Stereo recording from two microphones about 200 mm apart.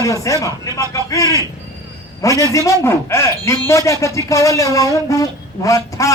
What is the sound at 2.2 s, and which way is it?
A man's voice, 15° left (ahead or behind).